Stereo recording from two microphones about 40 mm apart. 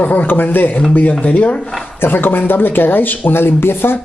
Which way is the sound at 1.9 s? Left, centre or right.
Left.